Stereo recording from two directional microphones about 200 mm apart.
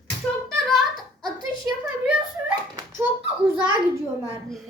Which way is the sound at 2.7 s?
15° right (ahead or behind).